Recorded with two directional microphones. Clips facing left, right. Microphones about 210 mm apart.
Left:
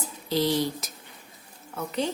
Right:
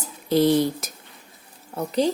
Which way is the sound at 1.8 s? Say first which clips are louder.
Right 7 dB; 35° right (ahead or behind).